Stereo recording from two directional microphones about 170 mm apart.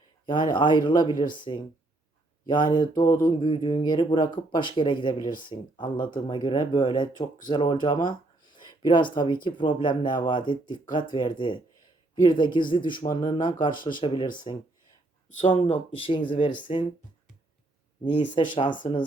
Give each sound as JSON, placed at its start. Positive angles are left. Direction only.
{"t": 0.3, "sound": "speech", "side_deg": 25}
{"t": 18.0, "sound": "speech", "side_deg": 30}